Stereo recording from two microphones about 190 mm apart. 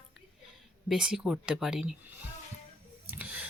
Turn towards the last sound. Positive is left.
turn(degrees=-10)  # may be behind; listen again after turning